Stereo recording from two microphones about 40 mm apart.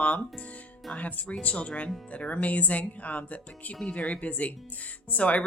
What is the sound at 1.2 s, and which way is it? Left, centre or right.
Speech, left.